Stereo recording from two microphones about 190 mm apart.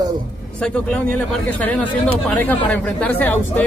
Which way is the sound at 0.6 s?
5° left (ahead or behind).